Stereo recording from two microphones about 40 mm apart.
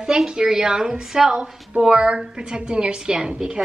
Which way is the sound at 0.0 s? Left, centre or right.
Centre.